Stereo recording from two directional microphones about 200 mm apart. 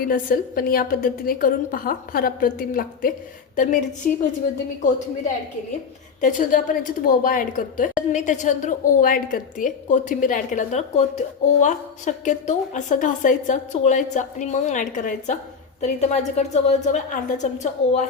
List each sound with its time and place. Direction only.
0.0 s a woman's voice: 45° left (ahead or behind)
6.1 s a woman's voice: 40° left (ahead or behind)